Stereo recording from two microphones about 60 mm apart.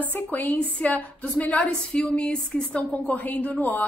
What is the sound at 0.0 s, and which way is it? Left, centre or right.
A woman's voice, left.